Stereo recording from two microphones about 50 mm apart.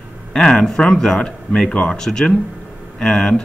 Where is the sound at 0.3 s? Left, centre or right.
Centre.